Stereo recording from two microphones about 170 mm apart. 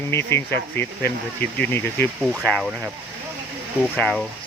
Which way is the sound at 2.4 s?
Centre (ahead or behind).